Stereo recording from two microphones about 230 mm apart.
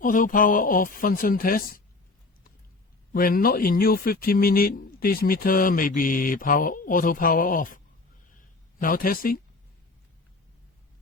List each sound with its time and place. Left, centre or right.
0.0 s speech: left
3.1 s speech: left
8.8 s speech: left